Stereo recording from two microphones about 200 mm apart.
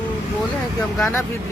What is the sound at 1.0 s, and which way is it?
Speech, 10° left (ahead or behind).